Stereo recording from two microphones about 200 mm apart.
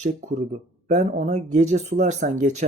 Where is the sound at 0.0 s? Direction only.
35° right (ahead or behind).